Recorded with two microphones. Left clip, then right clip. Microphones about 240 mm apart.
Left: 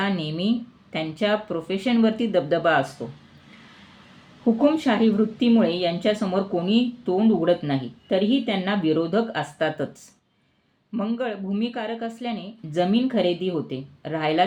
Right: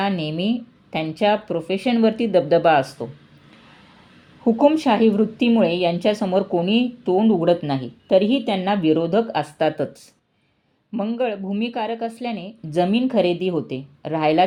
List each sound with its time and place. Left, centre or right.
0.0 s a woman's voice: right
4.5 s a woman's voice: centre
10.9 s a woman's voice: centre